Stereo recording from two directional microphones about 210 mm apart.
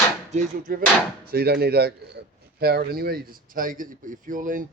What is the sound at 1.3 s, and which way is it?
Speech, 50° right (ahead or behind).